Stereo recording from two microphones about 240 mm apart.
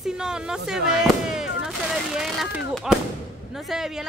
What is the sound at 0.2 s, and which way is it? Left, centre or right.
Speech, centre.